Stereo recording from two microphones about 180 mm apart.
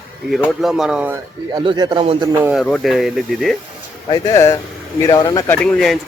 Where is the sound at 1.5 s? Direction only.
25° right (ahead or behind).